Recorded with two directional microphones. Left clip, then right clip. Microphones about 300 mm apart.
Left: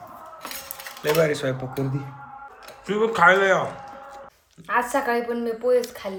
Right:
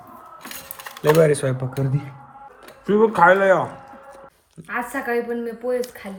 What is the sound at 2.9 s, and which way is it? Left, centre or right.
Speech, centre.